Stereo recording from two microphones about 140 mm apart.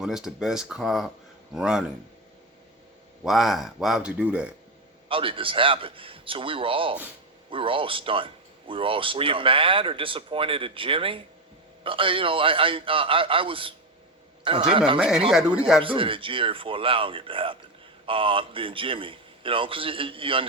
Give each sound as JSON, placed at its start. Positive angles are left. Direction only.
{"t": 0.0, "sound": "speech", "side_deg": -5}
{"t": 3.2, "sound": "speech", "side_deg": 0}
{"t": 5.0, "sound": "a man's voice", "side_deg": -40}
{"t": 14.9, "sound": "speech", "side_deg": -5}
{"t": 15.8, "sound": "a man's voice", "side_deg": -40}